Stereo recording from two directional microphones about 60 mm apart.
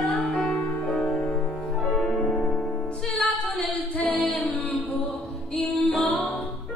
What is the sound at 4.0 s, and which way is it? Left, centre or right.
Music, left.